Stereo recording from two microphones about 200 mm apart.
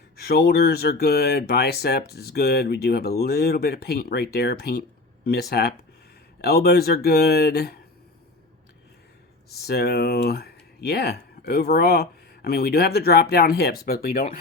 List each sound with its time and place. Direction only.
0.2 s speech: 50° left (ahead or behind)
9.5 s speech: 55° left (ahead or behind)